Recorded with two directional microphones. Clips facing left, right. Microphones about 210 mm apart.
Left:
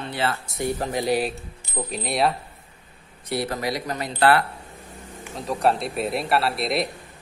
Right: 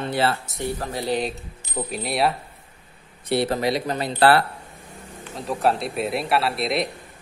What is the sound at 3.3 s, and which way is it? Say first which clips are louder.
Speech: right 5 dB; 25° right (ahead or behind).